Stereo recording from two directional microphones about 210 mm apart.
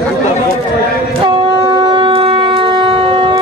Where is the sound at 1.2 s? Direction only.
20° right (ahead or behind).